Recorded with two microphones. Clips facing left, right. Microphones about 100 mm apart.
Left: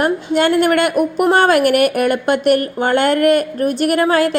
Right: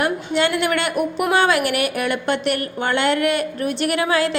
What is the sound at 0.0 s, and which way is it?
A woman's voice, 45° left (ahead or behind).